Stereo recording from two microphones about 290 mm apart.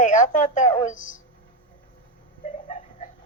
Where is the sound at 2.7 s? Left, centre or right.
Left.